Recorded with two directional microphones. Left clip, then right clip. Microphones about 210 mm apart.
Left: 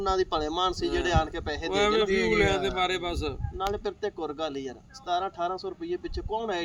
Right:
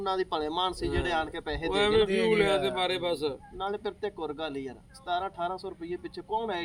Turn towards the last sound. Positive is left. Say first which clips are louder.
# left 1 dB
turn(degrees=5)  # may be behind; listen again after turning